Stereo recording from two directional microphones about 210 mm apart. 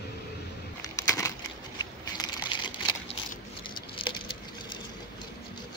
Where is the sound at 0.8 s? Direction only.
15° left (ahead or behind).